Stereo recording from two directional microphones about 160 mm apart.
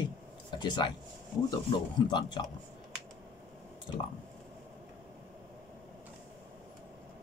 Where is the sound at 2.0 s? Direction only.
25° left (ahead or behind).